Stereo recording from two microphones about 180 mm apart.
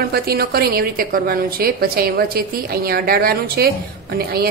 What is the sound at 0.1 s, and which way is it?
A woman's voice, 60° right (ahead or behind).